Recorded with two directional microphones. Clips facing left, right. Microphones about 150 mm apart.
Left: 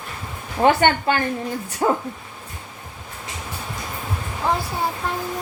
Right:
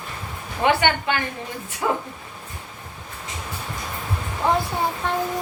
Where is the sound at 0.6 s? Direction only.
40° left (ahead or behind).